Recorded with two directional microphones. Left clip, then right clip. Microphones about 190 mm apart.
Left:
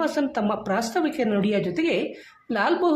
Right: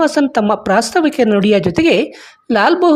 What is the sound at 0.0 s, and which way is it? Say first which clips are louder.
Speech: right 11 dB; 45° right (ahead or behind).